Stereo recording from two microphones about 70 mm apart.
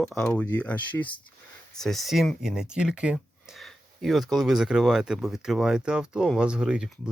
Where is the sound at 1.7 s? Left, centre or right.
Centre.